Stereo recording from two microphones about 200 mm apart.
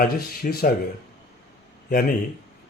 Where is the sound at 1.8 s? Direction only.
45° left (ahead or behind).